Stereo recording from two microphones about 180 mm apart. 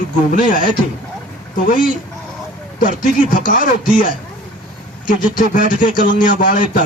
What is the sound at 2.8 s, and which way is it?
A man's voice, 45° left (ahead or behind).